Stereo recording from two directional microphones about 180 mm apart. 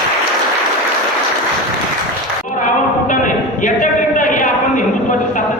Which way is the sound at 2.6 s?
45° left (ahead or behind).